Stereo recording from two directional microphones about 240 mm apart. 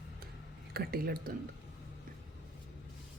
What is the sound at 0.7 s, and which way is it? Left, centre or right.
Speech, right.